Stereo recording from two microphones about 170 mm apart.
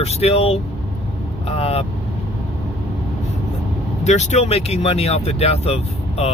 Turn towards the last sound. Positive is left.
turn(degrees=35)  # may be behind; listen again after turning